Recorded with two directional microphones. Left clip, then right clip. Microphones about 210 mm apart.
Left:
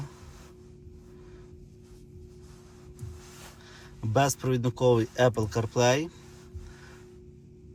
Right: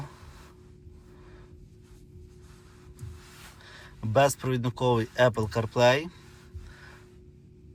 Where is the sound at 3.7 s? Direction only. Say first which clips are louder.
Right 2 dB; 15° left (ahead or behind).